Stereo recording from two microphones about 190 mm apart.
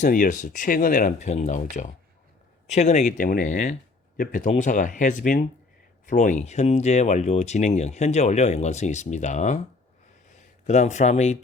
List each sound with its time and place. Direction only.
0.0 s speech: 45° left (ahead or behind)